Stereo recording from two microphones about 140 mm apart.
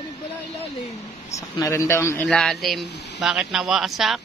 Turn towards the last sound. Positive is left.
turn(degrees=0)  # may be behind; listen again after turning